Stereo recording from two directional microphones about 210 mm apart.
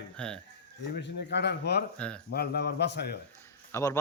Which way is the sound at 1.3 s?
55° left (ahead or behind).